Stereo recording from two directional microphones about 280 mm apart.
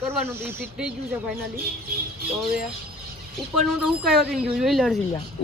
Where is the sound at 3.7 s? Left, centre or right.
Centre.